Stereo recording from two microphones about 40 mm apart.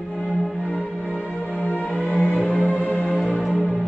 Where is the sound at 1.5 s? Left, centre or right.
Left.